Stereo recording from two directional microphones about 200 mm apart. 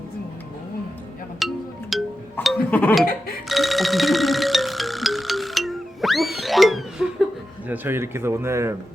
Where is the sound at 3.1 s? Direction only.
50° left (ahead or behind).